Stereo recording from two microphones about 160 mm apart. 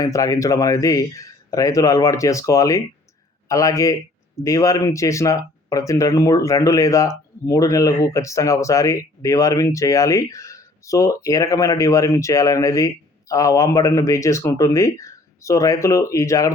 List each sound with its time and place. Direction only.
0.0 s speech: 20° left (ahead or behind)